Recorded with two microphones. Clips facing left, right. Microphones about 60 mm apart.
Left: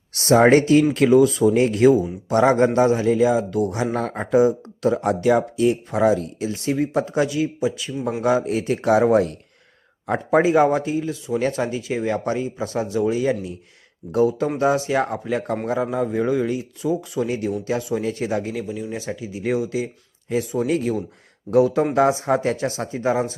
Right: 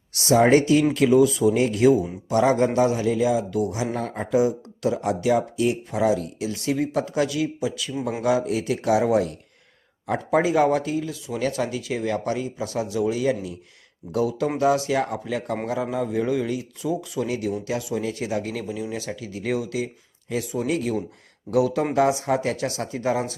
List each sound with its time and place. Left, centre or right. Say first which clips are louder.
0.1 s speech: left 3 dB; left
4.1 s speech: left 4 dB; left
6.5 s speech: left 2 dB; left
18.9 s speech: left 2 dB; left